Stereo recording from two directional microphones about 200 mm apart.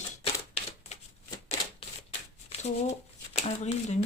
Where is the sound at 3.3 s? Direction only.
30° left (ahead or behind).